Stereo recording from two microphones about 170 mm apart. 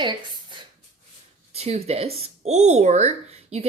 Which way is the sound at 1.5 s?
40° right (ahead or behind).